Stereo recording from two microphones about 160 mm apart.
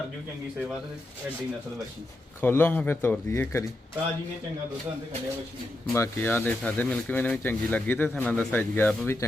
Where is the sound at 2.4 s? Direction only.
15° left (ahead or behind).